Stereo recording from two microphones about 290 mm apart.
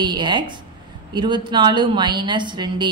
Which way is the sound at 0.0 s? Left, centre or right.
Centre.